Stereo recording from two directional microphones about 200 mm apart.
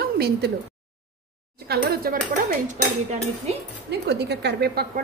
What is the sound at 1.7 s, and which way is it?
Speech, 50° right (ahead or behind).